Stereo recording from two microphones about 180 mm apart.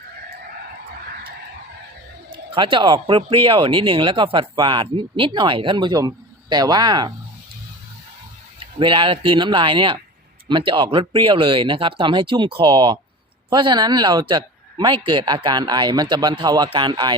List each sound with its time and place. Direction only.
2.3 s speech: 25° right (ahead or behind)
8.5 s speech: 30° right (ahead or behind)